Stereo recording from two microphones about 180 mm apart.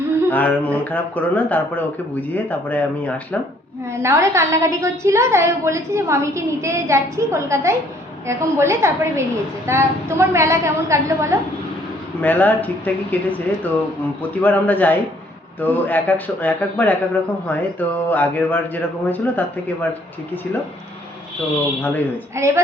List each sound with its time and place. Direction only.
0.3 s speech: 10° left (ahead or behind)
3.9 s a woman's voice: 15° right (ahead or behind)
12.2 s speech: 10° left (ahead or behind)
21.8 s speech: 10° left (ahead or behind)
22.4 s a woman's voice: 15° right (ahead or behind)